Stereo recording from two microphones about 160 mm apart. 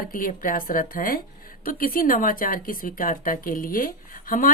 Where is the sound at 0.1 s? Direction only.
60° left (ahead or behind).